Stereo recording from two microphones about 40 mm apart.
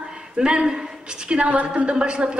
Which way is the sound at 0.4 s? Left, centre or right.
Right.